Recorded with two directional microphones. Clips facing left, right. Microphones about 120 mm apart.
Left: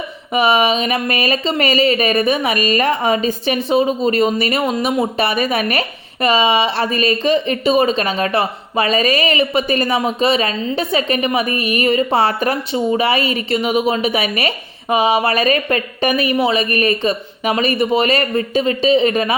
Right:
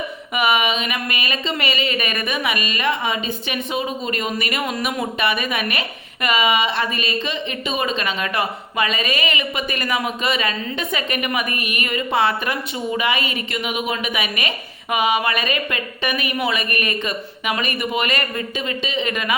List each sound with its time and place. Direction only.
0.3 s speech: 30° left (ahead or behind)